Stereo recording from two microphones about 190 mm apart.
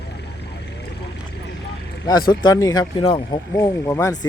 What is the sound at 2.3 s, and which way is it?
Speech, 25° left (ahead or behind).